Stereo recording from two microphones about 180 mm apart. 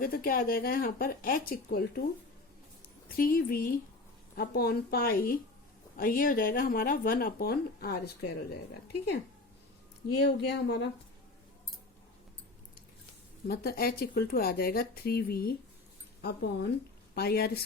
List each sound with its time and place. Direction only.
0.0 s speech: 55° left (ahead or behind)
3.2 s speech: 55° left (ahead or behind)
10.2 s speech: 70° left (ahead or behind)
13.5 s speech: 60° left (ahead or behind)